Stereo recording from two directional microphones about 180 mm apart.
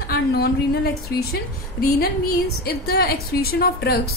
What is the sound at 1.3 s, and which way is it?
A woman's voice, 60° left (ahead or behind).